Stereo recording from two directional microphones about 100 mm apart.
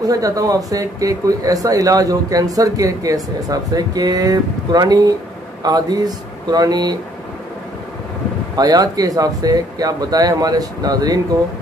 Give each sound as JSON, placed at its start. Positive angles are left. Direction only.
{"t": 0.0, "sound": "speech", "side_deg": -35}
{"t": 8.5, "sound": "speech", "side_deg": -40}